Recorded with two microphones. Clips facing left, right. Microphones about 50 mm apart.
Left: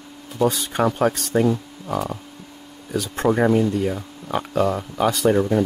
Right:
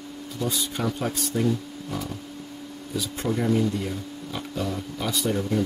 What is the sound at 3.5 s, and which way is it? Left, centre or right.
Speech, left.